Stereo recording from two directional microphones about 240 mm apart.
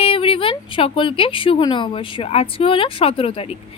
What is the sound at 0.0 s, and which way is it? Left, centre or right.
A woman's voice, left.